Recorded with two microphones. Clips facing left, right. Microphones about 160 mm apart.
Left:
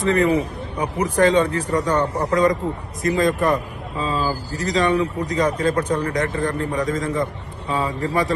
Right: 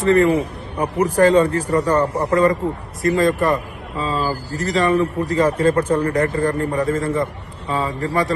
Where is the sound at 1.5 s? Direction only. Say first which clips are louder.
Right 3 dB; 35° right (ahead or behind).